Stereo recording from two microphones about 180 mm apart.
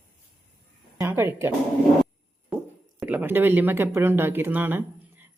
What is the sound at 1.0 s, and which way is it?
Speech, 10° right (ahead or behind).